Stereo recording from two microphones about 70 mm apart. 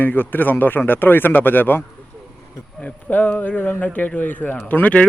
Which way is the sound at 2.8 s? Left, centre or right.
Left.